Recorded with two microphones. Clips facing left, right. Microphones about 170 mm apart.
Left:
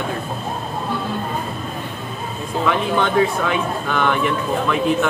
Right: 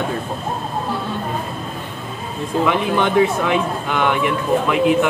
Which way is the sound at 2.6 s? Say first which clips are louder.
Right 1 dB; 15° right (ahead or behind).